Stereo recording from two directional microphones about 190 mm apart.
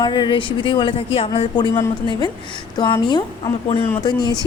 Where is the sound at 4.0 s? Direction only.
20° left (ahead or behind).